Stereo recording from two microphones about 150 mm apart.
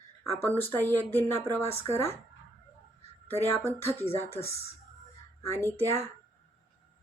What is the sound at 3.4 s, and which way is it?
Speech, 15° left (ahead or behind).